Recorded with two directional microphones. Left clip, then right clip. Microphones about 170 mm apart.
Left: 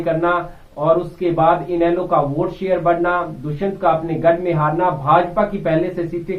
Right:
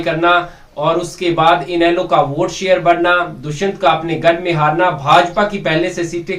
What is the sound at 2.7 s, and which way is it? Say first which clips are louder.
A man's voice: right 5 dB; 15° right (ahead or behind).